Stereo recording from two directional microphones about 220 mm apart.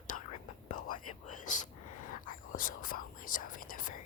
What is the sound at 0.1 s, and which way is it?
Whispering, 35° left (ahead or behind).